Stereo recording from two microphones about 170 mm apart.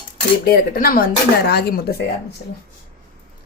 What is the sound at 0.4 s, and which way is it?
Speech, 60° left (ahead or behind).